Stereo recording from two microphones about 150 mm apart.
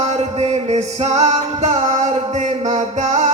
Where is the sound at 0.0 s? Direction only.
45° right (ahead or behind).